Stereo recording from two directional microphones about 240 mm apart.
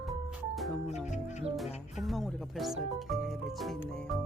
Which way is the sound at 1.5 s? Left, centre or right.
Centre.